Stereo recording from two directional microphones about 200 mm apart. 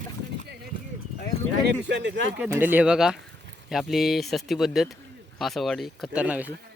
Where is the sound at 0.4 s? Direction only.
55° right (ahead or behind).